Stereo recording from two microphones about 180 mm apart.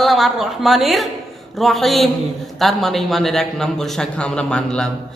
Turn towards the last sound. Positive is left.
turn(degrees=5)  # may be behind; listen again after turning